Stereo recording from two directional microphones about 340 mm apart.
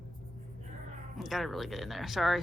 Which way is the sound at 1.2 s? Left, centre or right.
Centre.